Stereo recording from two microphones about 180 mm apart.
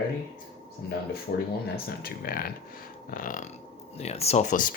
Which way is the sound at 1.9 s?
55° left (ahead or behind).